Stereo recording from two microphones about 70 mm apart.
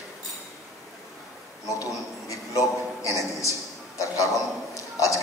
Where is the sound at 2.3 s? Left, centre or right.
Left.